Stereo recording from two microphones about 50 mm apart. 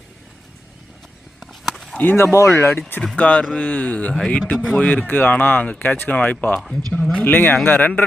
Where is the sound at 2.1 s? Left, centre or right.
Left.